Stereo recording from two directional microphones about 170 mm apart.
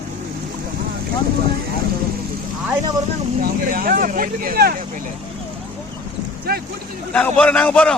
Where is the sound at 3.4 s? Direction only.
60° right (ahead or behind).